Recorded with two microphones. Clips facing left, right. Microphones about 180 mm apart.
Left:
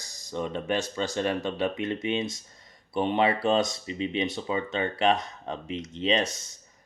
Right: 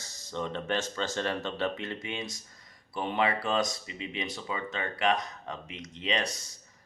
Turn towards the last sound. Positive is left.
turn(degrees=25)  # may be behind; listen again after turning